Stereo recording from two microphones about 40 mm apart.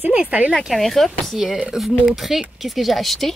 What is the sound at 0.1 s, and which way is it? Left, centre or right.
Speech, right.